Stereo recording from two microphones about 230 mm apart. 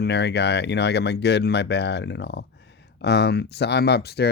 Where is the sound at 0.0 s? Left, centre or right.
Left.